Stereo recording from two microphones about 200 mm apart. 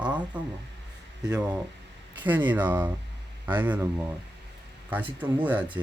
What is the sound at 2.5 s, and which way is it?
Speech, 10° right (ahead or behind).